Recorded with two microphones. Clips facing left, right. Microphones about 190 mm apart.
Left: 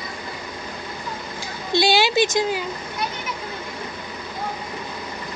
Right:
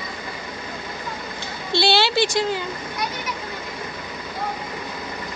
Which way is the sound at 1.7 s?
15° left (ahead or behind).